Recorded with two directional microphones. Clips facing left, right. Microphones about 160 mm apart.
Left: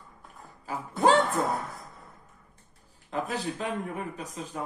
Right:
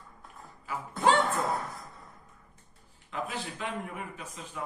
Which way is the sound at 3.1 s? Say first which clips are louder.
Left 5 dB; 40° left (ahead or behind).